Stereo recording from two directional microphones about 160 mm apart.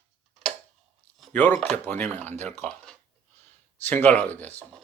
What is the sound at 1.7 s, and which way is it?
Speech, 10° left (ahead or behind).